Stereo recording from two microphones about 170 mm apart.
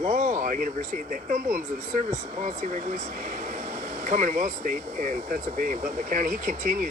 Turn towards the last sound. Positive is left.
turn(degrees=-50)  # may be behind; listen again after turning